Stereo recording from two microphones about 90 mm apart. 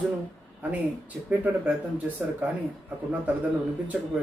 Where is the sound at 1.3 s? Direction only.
15° right (ahead or behind).